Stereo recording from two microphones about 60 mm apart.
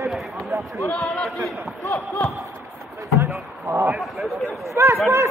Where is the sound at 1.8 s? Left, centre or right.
Left.